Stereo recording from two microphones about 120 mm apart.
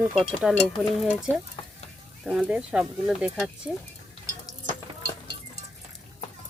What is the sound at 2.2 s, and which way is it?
Speech, centre (ahead or behind).